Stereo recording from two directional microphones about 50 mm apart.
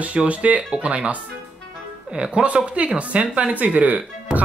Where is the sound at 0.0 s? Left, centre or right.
Right.